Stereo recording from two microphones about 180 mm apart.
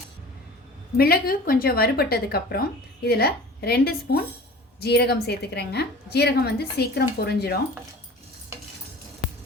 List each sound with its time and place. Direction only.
0.9 s a woman's voice: 55° left (ahead or behind)